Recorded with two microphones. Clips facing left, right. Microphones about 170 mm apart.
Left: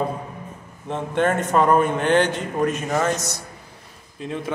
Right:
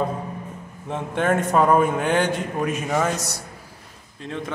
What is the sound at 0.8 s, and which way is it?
A man's voice, 5° right (ahead or behind).